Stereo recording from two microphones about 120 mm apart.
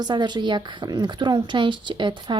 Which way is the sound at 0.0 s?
40° right (ahead or behind).